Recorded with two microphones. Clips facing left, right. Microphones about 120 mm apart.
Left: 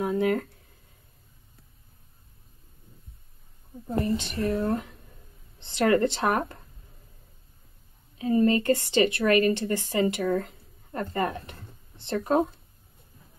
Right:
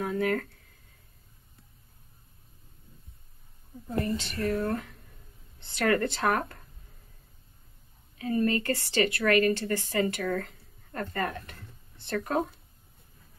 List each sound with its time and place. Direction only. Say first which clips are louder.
0.0 s speech: left 3 dB; 20° left (ahead or behind)
3.8 s speech: left 3 dB; 30° left (ahead or behind)
8.2 s a woman's voice: left 5 dB; 25° left (ahead or behind)